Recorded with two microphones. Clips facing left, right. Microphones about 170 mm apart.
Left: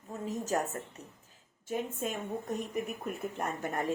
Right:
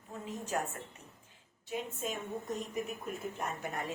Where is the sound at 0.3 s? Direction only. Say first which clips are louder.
Left 4 dB; 40° left (ahead or behind).